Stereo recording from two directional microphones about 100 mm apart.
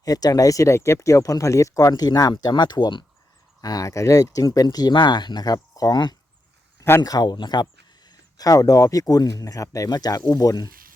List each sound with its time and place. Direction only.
0.0 s speech: 40° left (ahead or behind)
6.7 s a sound: 25° left (ahead or behind)
7.0 s speech: 40° left (ahead or behind)